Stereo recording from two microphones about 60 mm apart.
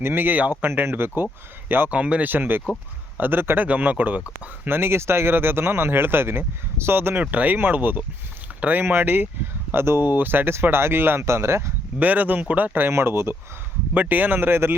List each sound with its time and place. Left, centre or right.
0.0 s speech: right
1.9 s speech: right
2.3 s speech: right
4.6 s speech: right
7.2 s speech: right
11.9 s speech: right
12.9 s speech: right
13.9 s speech: right